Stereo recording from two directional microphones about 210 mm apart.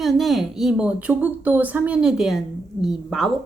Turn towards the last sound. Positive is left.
turn(degrees=0)  # may be behind; listen again after turning